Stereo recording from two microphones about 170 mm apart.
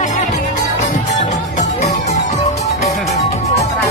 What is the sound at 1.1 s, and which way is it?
Music, 40° left (ahead or behind).